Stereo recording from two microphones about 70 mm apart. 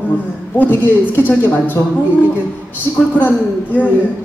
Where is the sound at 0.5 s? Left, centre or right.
Left.